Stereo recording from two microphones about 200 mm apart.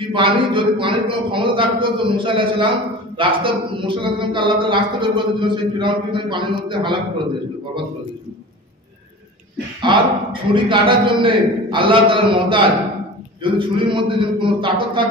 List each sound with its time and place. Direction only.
0.1 s a man's voice: 25° right (ahead or behind)
9.8 s a man's voice: 25° right (ahead or behind)